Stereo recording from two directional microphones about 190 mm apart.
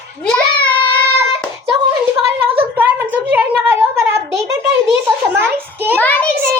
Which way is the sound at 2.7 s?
10° right (ahead or behind).